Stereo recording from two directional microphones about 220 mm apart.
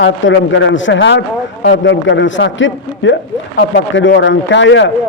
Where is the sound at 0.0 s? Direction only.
60° left (ahead or behind).